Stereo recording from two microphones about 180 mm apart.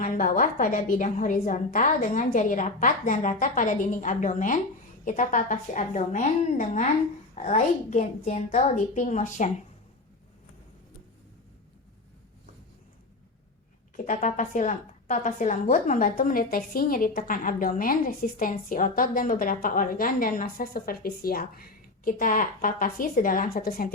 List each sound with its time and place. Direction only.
0.0 s a woman's voice: 50° left (ahead or behind)
13.9 s a woman's voice: 45° left (ahead or behind)